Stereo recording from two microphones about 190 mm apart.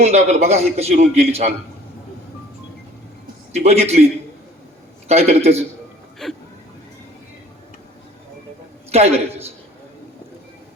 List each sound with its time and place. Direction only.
0.0 s a man's voice: 35° right (ahead or behind)
3.5 s a man's voice: 35° right (ahead or behind)
5.0 s a man's voice: 35° right (ahead or behind)
6.2 s speech: 5° left (ahead or behind)
8.9 s a man's voice: 35° right (ahead or behind)